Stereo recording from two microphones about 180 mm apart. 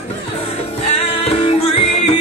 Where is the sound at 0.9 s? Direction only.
35° left (ahead or behind).